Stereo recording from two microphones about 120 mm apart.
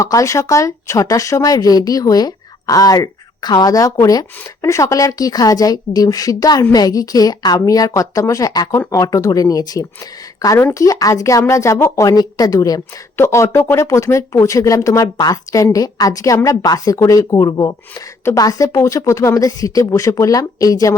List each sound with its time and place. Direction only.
0.0 s a woman's voice: 25° left (ahead or behind)